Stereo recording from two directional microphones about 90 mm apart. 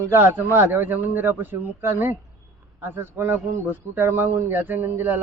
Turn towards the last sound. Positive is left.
turn(degrees=-20)  # may be behind; listen again after turning